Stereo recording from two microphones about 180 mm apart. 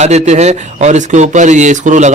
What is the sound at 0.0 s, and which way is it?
A man's voice, 40° right (ahead or behind).